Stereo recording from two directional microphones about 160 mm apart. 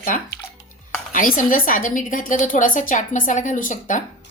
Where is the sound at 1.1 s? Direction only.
55° left (ahead or behind).